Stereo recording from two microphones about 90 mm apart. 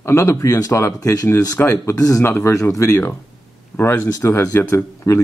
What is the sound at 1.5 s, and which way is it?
Speech, 25° left (ahead or behind).